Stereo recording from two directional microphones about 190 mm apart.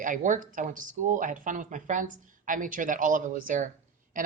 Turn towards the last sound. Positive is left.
turn(degrees=-45)  # may be behind; listen again after turning